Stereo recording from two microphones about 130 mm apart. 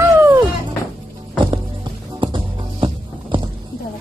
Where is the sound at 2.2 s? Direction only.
40° right (ahead or behind).